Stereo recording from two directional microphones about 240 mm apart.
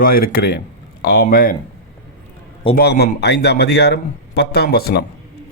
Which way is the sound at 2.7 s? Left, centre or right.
Left.